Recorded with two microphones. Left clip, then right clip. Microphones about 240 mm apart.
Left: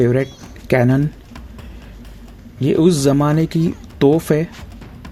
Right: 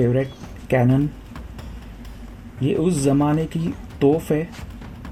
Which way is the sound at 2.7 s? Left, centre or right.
Left.